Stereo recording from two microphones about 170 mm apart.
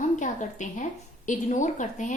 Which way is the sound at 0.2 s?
45° left (ahead or behind).